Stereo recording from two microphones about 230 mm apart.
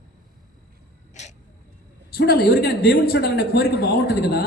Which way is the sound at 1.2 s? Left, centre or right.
Left.